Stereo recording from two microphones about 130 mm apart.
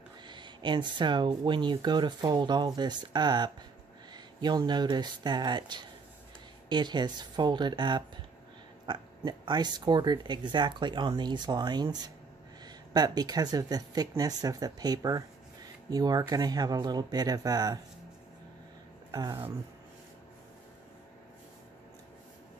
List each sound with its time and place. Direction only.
0.3 s speech: 35° right (ahead or behind)
19.1 s speech: 30° right (ahead or behind)